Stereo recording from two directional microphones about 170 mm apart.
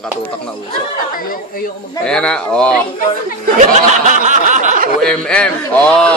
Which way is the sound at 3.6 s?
45° right (ahead or behind).